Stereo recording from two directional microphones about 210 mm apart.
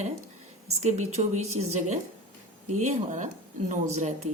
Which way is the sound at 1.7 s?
35° right (ahead or behind).